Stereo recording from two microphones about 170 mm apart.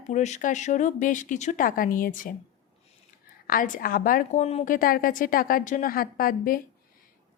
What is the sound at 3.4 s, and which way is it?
A woman's voice, 55° left (ahead or behind).